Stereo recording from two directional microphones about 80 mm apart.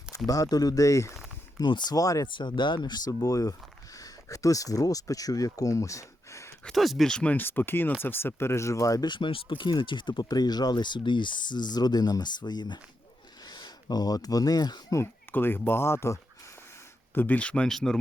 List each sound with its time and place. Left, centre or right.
0.3 s speech: left
1.6 s speech: left
2.2 s speech: left
3.1 s speech: left
6.7 s speech: centre; by 9.0 s left
9.0 s speech: left
14.9 s speech: left
17.2 s speech: centre